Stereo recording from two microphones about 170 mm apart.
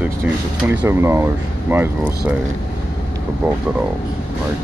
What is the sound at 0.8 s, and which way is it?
Speech, 15° right (ahead or behind).